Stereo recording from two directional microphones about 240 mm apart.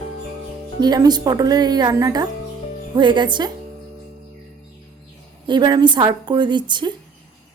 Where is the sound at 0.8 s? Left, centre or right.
Centre.